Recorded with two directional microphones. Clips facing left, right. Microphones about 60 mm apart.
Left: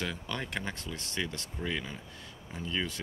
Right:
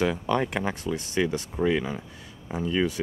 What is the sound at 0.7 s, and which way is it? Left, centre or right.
Speech, centre.